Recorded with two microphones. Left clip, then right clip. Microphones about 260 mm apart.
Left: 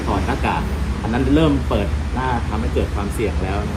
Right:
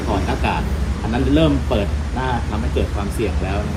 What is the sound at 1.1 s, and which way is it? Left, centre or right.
Speech, centre.